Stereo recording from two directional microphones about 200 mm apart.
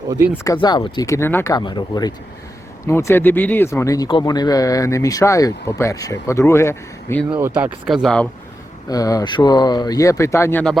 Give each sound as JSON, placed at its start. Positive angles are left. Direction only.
{"t": 0.1, "sound": "speech", "side_deg": -10}
{"t": 0.4, "sound": "speech", "side_deg": 20}
{"t": 7.3, "sound": "speech", "side_deg": -10}
{"t": 8.0, "sound": "speech", "side_deg": 5}
{"t": 8.9, "sound": "speech", "side_deg": 15}